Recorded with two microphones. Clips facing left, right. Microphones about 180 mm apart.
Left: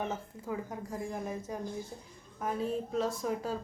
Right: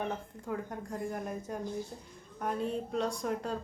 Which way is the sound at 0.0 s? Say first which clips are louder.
Even; 5° left (ahead or behind).